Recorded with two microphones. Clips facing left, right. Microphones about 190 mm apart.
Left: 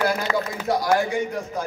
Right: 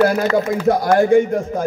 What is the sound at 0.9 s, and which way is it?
Speech, 50° right (ahead or behind).